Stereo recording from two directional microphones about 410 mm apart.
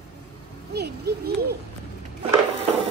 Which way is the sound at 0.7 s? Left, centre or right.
Right.